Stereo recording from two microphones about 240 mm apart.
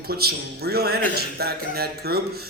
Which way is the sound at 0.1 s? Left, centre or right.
Right.